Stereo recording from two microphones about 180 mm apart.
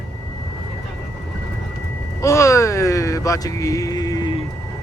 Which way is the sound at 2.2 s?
15° left (ahead or behind).